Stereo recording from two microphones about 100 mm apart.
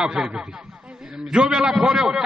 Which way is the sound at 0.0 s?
10° right (ahead or behind).